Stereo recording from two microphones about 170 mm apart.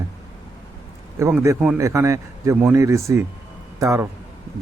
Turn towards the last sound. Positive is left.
turn(degrees=-20)  # may be behind; listen again after turning